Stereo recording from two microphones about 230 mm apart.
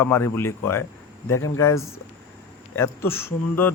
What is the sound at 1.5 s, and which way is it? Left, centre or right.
A man's voice, centre.